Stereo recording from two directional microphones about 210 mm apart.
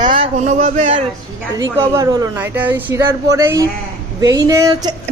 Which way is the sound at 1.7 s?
15° right (ahead or behind).